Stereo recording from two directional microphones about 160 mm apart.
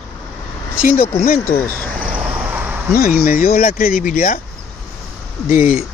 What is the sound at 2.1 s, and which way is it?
Vehicle, 10° right (ahead or behind).